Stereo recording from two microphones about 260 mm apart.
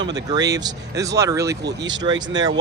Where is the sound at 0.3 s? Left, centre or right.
Centre.